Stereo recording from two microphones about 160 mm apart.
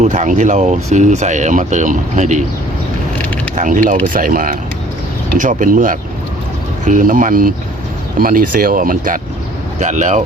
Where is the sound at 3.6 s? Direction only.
50° right (ahead or behind).